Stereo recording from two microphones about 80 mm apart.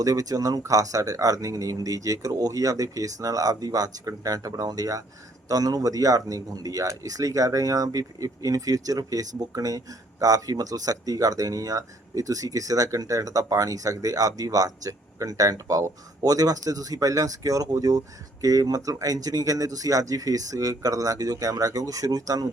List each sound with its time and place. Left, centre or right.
0.0 s speech: right